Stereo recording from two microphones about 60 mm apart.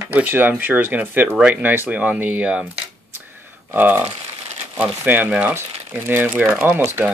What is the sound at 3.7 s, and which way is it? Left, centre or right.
Speech, right.